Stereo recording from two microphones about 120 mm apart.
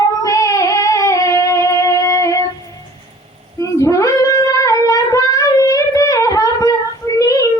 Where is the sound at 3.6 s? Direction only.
25° left (ahead or behind).